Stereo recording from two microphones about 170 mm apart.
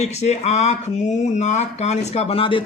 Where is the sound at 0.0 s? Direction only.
40° left (ahead or behind).